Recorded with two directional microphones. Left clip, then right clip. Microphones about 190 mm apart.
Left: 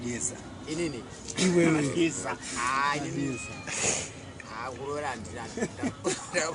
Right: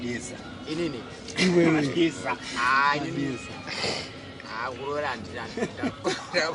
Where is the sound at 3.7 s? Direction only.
5° left (ahead or behind).